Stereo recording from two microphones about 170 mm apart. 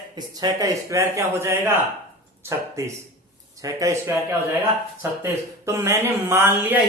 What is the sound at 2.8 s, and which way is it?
A man's voice, 15° right (ahead or behind).